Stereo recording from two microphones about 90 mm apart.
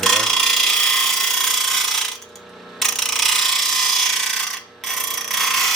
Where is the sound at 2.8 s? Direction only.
Centre (ahead or behind).